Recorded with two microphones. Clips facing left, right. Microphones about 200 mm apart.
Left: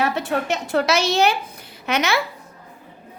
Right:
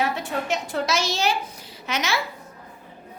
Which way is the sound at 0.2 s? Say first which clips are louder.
Left 4 dB; 70° left (ahead or behind).